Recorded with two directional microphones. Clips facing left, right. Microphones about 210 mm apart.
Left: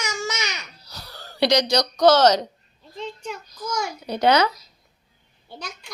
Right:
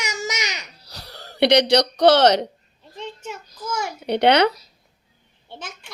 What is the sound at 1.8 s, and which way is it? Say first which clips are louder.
Speech: right 1 dB; 30° right (ahead or behind).